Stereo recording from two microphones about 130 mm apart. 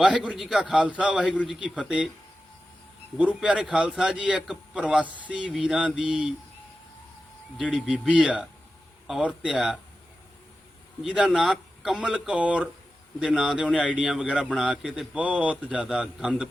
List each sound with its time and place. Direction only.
0.0 s a man's voice: 5° right (ahead or behind)
3.2 s a man's voice: 10° right (ahead or behind)
7.6 s a man's voice: 5° right (ahead or behind)
11.0 s a man's voice: 5° right (ahead or behind)